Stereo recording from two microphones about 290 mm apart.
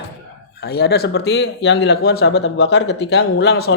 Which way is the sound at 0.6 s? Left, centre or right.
Left.